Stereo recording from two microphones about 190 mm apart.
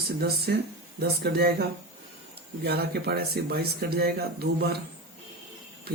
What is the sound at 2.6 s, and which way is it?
Speech, 55° right (ahead or behind).